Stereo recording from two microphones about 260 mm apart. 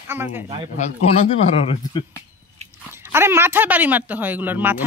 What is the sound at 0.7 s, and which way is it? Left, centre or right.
Speech, left.